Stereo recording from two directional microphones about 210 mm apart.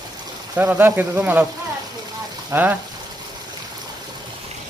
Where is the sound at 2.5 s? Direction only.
10° right (ahead or behind).